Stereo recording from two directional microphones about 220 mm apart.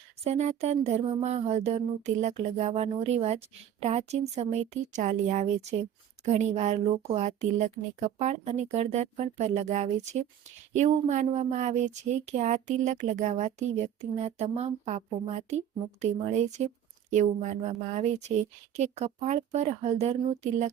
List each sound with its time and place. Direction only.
0.3 s speech: 30° right (ahead or behind)